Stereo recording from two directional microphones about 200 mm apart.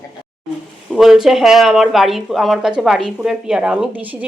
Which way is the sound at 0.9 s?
Centre (ahead or behind).